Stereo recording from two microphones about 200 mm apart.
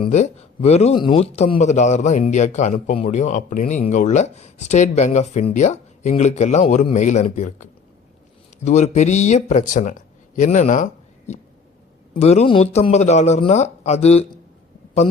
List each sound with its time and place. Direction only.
0.0 s a man's voice: 35° left (ahead or behind)
12.1 s a man's voice: 30° left (ahead or behind)